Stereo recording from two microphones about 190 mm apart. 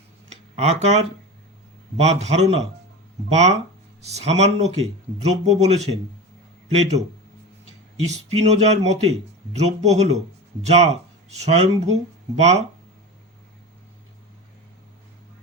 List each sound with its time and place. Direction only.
0.5 s speech: 35° right (ahead or behind)
8.3 s speech: 35° right (ahead or behind)